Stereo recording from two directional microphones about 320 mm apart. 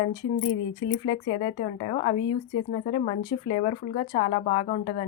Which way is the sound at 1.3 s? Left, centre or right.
Centre.